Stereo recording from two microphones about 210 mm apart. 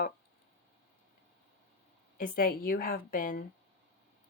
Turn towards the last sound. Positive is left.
turn(degrees=40)  # may be behind; listen again after turning